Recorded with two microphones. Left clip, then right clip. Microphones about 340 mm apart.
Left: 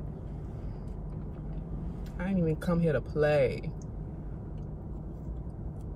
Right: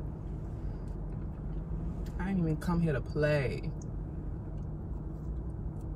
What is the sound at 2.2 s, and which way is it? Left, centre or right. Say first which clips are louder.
Speech: left 4 dB; centre.